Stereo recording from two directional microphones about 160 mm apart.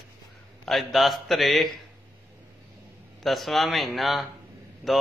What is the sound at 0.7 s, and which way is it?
A man's voice, centre (ahead or behind).